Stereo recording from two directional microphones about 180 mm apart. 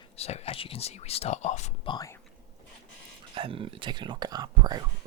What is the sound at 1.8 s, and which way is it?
Speech, 20° left (ahead or behind).